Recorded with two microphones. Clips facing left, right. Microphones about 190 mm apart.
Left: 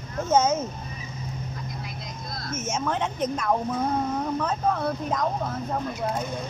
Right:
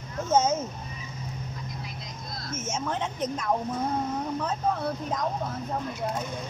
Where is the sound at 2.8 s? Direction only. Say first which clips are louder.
Left 3 dB; 60° left (ahead or behind).